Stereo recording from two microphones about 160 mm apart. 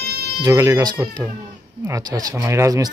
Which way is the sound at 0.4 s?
20° right (ahead or behind).